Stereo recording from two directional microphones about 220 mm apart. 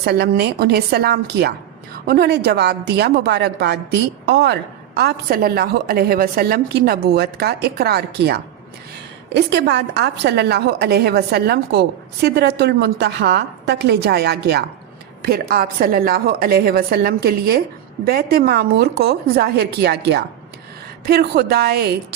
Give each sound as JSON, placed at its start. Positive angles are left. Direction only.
{"t": 0.0, "sound": "a woman's voice", "side_deg": -50}